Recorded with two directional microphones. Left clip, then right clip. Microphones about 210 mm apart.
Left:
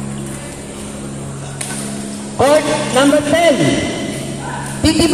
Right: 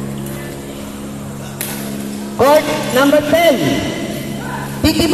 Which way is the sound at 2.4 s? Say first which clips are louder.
Right 1 dB; 10° right (ahead or behind).